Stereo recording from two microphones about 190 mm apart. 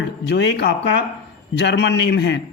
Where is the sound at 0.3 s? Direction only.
65° left (ahead or behind).